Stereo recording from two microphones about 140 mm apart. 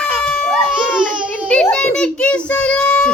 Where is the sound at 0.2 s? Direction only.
5° left (ahead or behind).